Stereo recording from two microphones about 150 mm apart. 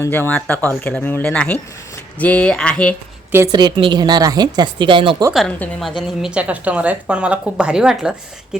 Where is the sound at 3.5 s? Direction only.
30° right (ahead or behind).